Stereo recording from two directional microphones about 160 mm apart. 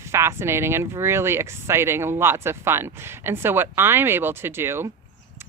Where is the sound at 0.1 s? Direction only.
15° right (ahead or behind).